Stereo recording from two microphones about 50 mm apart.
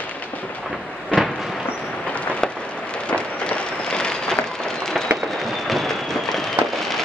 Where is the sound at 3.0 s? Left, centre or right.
Left.